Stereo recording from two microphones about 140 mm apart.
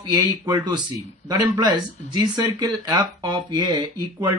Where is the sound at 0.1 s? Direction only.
25° right (ahead or behind).